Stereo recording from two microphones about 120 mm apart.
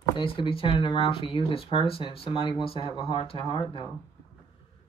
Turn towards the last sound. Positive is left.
turn(degrees=45)  # may be behind; listen again after turning